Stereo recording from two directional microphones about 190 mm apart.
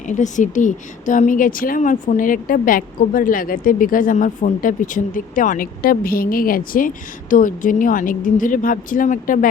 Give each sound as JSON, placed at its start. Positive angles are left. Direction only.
{"t": 0.1, "sound": "a woman's voice", "side_deg": 40}